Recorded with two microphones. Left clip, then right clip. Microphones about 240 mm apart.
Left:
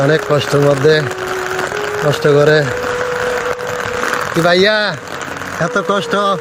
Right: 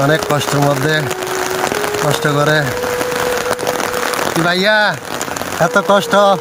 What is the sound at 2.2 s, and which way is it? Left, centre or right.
Speech, centre.